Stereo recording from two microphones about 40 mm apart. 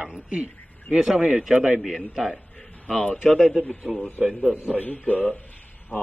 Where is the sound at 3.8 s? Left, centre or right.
Right.